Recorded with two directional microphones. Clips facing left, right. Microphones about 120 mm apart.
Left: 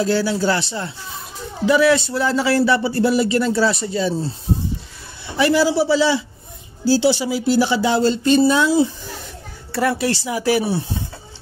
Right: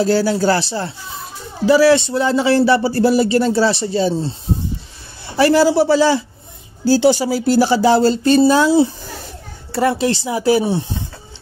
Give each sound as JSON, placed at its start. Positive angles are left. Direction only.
{"t": 0.0, "sound": "speech", "side_deg": -40}
{"t": 5.4, "sound": "a man's voice", "side_deg": -45}